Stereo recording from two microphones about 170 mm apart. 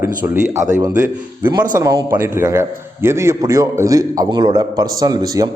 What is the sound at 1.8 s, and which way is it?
A man's voice, 15° right (ahead or behind).